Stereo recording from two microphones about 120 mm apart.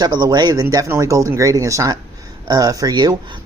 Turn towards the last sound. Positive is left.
turn(degrees=-35)  # may be behind; listen again after turning